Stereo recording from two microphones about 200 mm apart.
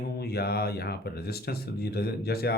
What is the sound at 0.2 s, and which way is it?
Speech, 50° left (ahead or behind).